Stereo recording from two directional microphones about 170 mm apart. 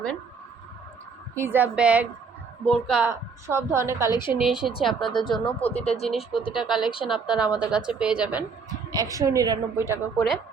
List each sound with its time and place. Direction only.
1.4 s a woman's voice: 10° right (ahead or behind)
3.0 s a woman's voice: 15° right (ahead or behind)
4.3 s a woman's voice: 5° right (ahead or behind)
5.6 s speech: 35° left (ahead or behind)
6.5 s a woman's voice: centre (ahead or behind)
8.9 s a woman's voice: 20° right (ahead or behind)
10.2 s a woman's voice: centre (ahead or behind)